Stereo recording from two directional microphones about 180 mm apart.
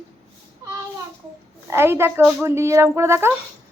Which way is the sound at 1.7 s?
15° right (ahead or behind).